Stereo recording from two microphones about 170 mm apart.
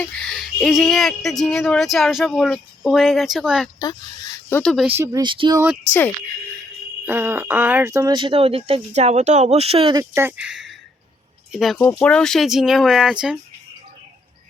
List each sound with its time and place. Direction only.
0.0 s speech: 5° left (ahead or behind)
3.8 s speech: 20° left (ahead or behind)
4.6 s speech: 5° left (ahead or behind)
4.9 s speech: 15° right (ahead or behind)
5.2 s speech: 30° right (ahead or behind)
7.0 s speech: 10° right (ahead or behind); by 10.0 s 35° right (ahead or behind)
10.0 s speech: 15° right (ahead or behind)
11.8 s speech: 10° left (ahead or behind)